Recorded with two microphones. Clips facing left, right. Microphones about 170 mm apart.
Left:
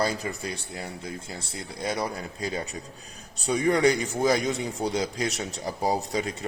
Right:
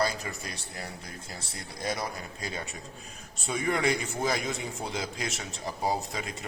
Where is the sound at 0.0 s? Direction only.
30° left (ahead or behind).